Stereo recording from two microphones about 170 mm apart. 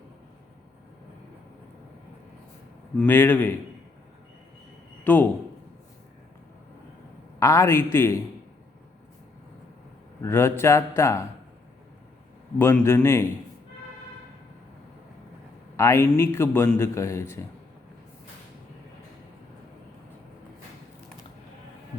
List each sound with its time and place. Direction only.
3.0 s a man's voice: 10° left (ahead or behind)
5.0 s a man's voice: 10° left (ahead or behind)
7.3 s a man's voice: 15° left (ahead or behind)
10.2 s a man's voice: 15° left (ahead or behind)
12.5 s a man's voice: 15° left (ahead or behind)
15.7 s a man's voice: 15° left (ahead or behind)